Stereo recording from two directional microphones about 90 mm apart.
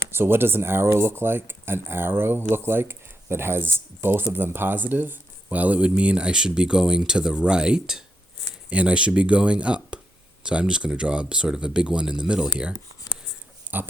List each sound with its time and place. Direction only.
0.1 s speech: 25° right (ahead or behind); by 12.7 s 10° right (ahead or behind)
13.7 s pig: 20° right (ahead or behind)